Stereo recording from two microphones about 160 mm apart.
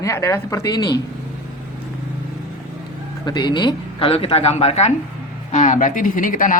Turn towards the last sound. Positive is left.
turn(degrees=55)  # may be behind; listen again after turning